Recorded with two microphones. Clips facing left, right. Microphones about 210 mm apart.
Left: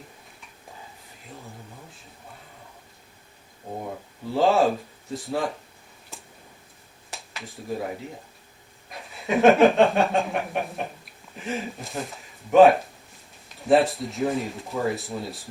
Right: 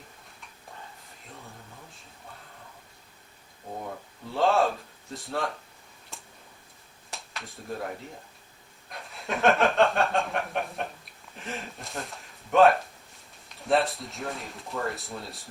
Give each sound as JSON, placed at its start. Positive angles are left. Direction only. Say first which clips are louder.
{"t": 4.3, "sound": "speech", "louder": "left 4 dB", "side_deg": 0}
{"t": 6.1, "sound": "tick-tock", "louder": "left 3 dB", "side_deg": 0}
{"t": 7.1, "sound": "speech", "louder": "left 2 dB", "side_deg": 0}
{"t": 8.9, "sound": "a sound", "louder": "left 7 dB", "side_deg": 0}
{"t": 11.3, "sound": "speech", "louder": "left 7 dB", "side_deg": 0}